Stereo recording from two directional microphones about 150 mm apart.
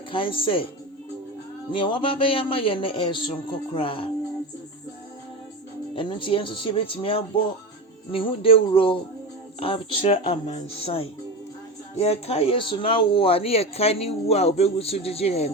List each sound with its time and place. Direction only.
0.1 s speech: 35° left (ahead or behind)
1.7 s speech: 35° left (ahead or behind)
5.9 s speech: 35° left (ahead or behind)